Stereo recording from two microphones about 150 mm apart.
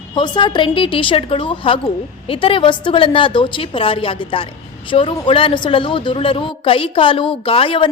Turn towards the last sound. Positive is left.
turn(degrees=35)  # may be behind; listen again after turning